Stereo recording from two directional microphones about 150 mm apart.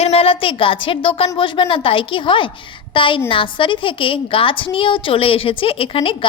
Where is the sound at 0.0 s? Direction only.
40° left (ahead or behind).